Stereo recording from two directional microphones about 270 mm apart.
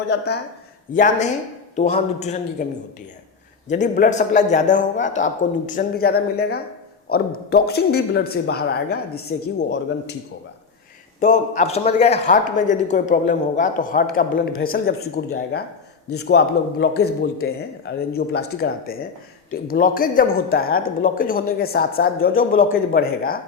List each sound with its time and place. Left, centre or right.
0.1 s a man's voice: left
3.7 s a man's voice: left
11.2 s a man's voice: left
16.0 s speech: left